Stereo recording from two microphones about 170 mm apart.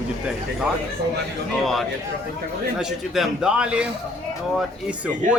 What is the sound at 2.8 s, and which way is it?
A man's voice, 5° right (ahead or behind).